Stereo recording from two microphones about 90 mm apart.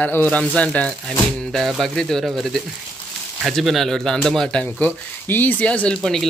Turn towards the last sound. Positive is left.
turn(degrees=5)  # may be behind; listen again after turning